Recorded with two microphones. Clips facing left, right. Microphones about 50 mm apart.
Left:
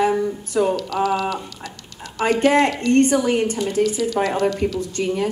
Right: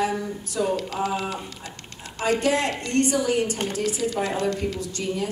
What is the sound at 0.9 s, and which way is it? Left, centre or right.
Speech, left.